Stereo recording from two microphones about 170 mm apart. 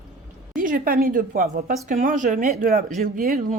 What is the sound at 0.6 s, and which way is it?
Speech, 55° right (ahead or behind).